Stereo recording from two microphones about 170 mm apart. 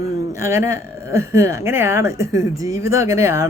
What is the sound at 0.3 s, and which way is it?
Speech, 15° right (ahead or behind).